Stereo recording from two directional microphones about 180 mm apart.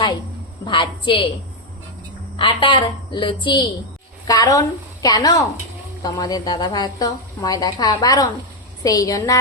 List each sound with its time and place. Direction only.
0.6 s a woman's voice: 25° left (ahead or behind)
2.3 s a woman's voice: 25° left (ahead or behind)